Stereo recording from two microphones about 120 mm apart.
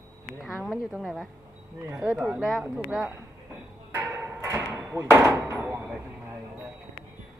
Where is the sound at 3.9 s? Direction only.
20° right (ahead or behind).